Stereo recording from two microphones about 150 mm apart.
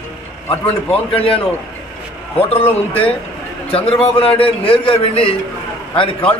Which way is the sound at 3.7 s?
40° left (ahead or behind).